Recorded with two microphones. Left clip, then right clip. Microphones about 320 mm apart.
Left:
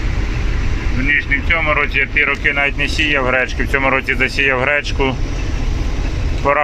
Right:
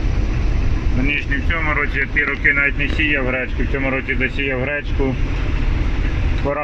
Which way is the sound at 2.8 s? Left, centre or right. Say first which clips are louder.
Left 3 dB; centre.